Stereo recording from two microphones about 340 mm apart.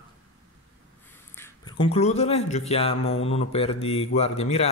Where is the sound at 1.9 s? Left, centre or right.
Centre.